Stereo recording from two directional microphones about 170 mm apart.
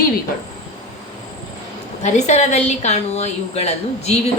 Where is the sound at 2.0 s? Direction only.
45° left (ahead or behind).